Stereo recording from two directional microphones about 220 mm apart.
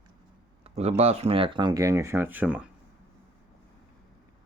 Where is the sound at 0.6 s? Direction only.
30° right (ahead or behind); by 2.6 s 5° right (ahead or behind).